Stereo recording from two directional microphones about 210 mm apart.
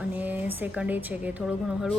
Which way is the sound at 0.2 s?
10° right (ahead or behind).